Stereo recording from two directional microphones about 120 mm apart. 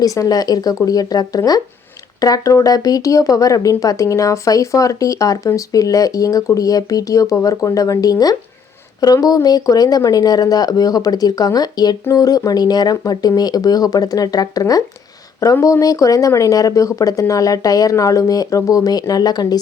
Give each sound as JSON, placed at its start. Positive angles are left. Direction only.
{"t": 0.0, "sound": "speech", "side_deg": 30}